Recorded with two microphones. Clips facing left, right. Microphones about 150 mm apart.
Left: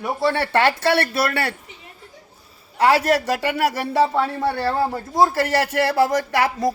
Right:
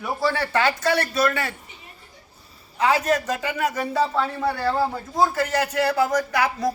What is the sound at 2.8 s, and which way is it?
A woman's voice, 70° left (ahead or behind).